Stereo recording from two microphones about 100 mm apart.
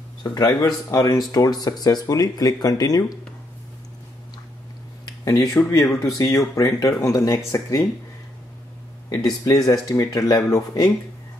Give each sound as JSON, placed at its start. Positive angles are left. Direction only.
{"t": 0.2, "sound": "speech", "side_deg": 40}
{"t": 5.2, "sound": "speech", "side_deg": 30}
{"t": 9.1, "sound": "speech", "side_deg": 40}